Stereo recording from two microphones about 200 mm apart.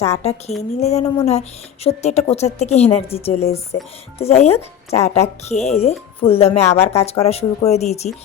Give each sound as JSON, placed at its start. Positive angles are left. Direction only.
{"t": 0.0, "sound": "speech", "side_deg": 30}